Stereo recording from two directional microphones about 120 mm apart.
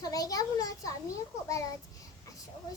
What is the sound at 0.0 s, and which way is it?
A child's voice, 30° left (ahead or behind).